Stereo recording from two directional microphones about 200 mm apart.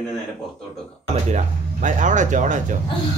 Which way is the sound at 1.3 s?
40° right (ahead or behind).